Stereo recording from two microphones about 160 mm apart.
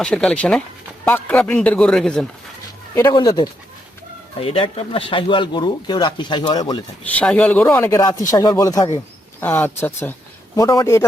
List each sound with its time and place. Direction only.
0.0 s a man's voice: 5° left (ahead or behind)
3.1 s speech: 25° left (ahead or behind)
4.4 s speech: 35° left (ahead or behind)
7.2 s a man's voice: 10° left (ahead or behind)
9.4 s speech: 15° left (ahead or behind)